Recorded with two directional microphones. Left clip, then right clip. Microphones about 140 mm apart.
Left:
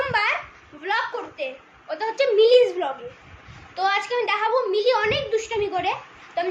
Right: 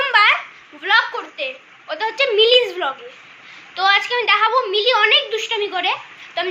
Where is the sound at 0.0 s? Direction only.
10° left (ahead or behind).